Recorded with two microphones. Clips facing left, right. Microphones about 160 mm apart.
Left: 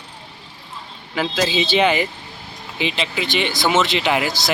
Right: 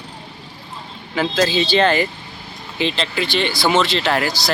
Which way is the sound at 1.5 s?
15° left (ahead or behind).